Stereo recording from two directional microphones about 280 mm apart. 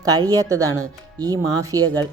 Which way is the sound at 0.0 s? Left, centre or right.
Centre.